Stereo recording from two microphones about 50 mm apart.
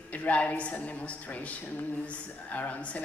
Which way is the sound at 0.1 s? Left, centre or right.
Left.